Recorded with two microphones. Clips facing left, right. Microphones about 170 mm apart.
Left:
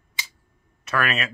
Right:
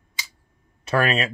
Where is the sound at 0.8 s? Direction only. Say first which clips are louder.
Right 4 dB; 30° right (ahead or behind).